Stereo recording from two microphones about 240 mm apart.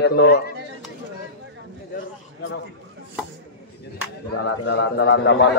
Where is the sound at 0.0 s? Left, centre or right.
Left.